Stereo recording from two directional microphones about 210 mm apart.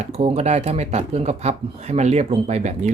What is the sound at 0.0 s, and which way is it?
Speech, 30° right (ahead or behind).